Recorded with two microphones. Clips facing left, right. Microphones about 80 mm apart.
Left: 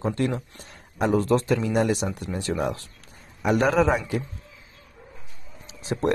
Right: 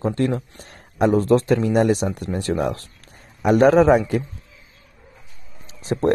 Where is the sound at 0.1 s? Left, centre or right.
Right.